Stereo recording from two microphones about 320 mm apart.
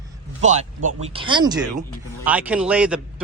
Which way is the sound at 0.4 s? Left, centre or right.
Right.